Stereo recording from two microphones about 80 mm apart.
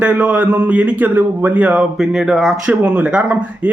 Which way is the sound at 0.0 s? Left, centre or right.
Centre.